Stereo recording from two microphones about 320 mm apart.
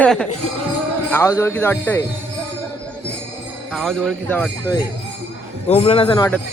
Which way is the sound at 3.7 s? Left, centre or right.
Centre.